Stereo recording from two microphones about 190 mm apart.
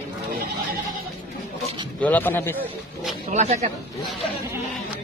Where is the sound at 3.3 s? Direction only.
40° right (ahead or behind).